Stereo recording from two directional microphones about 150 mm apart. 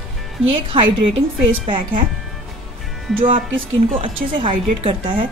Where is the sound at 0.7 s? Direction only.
35° right (ahead or behind).